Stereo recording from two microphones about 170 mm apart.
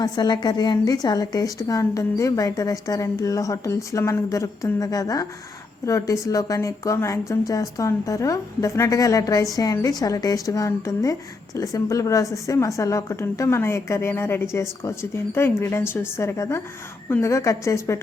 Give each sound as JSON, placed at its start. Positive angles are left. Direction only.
{"t": 0.0, "sound": "a woman's voice", "side_deg": 25}